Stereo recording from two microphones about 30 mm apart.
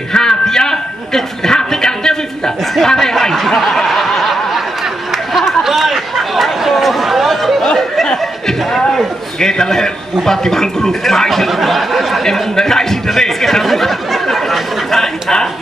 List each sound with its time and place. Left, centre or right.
0.1 s a sound: centre
3.3 s a sound: centre
3.7 s snicker: centre
5.1 s chatter: centre
7.6 s chatter: centre
8.5 s a sound: centre
9.4 s a man's voice: left
11.2 s speech: centre
13.2 s chatter: centre